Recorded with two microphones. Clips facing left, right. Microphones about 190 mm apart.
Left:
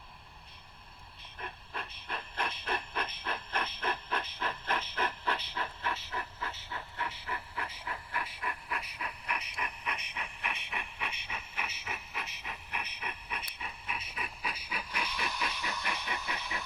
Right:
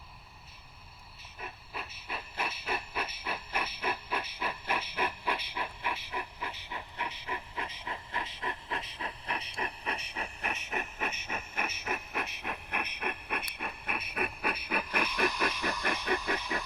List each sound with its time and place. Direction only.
1.4 s rail transport: 5° right (ahead or behind); by 16.6 s 50° right (ahead or behind)